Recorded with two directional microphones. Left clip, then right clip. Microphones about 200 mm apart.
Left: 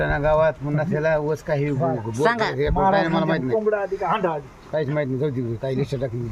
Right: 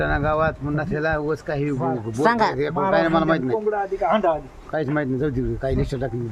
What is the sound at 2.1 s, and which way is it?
Speech, 20° right (ahead or behind).